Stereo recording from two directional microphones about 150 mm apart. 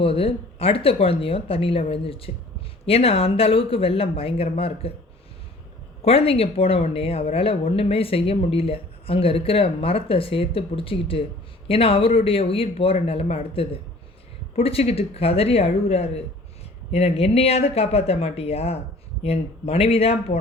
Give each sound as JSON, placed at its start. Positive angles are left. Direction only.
{"t": 0.0, "sound": "a woman's voice", "side_deg": 40}
{"t": 6.0, "sound": "a woman's voice", "side_deg": 40}